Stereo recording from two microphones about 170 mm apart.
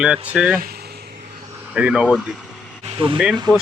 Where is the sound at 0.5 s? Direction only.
65° right (ahead or behind).